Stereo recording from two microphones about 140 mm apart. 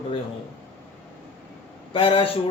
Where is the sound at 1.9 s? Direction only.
40° left (ahead or behind).